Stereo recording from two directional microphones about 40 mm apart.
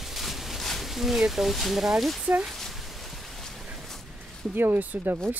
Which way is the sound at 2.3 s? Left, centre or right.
Right.